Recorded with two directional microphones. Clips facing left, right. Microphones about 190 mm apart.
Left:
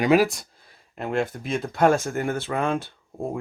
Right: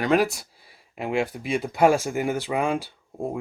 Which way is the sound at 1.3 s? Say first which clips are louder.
Right 1 dB; 10° right (ahead or behind).